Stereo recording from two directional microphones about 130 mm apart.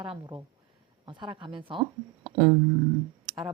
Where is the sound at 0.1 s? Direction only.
40° right (ahead or behind).